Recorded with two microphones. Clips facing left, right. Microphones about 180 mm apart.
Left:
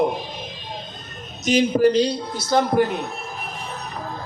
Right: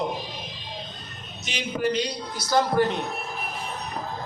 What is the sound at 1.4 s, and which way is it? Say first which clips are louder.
A man's voice: left 11 dB; 40° left (ahead or behind).